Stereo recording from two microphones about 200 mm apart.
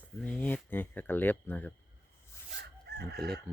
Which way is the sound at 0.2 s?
5° left (ahead or behind).